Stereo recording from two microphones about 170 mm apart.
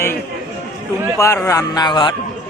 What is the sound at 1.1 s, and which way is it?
Speech, 15° left (ahead or behind).